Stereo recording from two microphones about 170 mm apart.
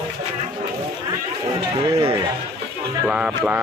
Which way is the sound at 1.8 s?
30° right (ahead or behind).